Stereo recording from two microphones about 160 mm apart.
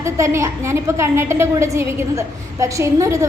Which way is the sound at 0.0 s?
20° right (ahead or behind).